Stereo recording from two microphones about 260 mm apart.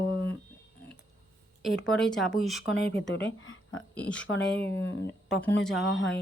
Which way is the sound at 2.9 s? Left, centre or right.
Left.